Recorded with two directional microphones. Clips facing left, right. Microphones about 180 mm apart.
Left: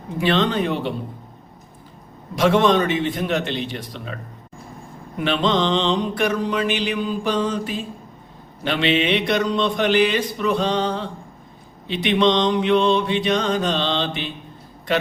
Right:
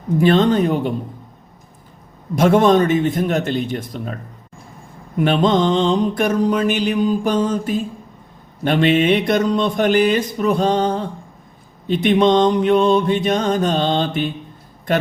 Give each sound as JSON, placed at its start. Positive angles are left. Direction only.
{"t": 0.2, "sound": "mantra", "side_deg": -45}
{"t": 2.3, "sound": "mantra", "side_deg": -45}
{"t": 5.2, "sound": "mantra", "side_deg": -45}